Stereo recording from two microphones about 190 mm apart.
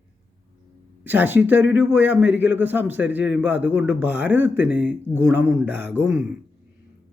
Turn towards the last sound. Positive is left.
turn(degrees=-5)  # may be behind; listen again after turning